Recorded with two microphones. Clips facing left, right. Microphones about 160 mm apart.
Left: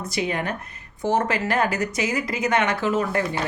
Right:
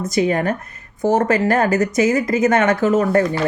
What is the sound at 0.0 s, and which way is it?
Speech, 45° right (ahead or behind).